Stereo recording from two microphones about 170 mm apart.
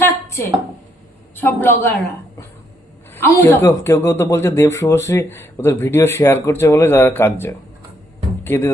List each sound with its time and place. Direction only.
0.0 s a sound: 15° left (ahead or behind)
1.4 s speech: 10° left (ahead or behind)
3.1 s speech: 15° left (ahead or behind)